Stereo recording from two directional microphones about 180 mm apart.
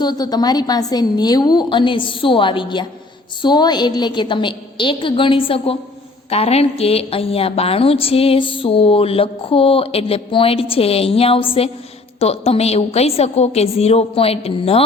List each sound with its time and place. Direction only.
0.0 s a woman's voice: 20° left (ahead or behind)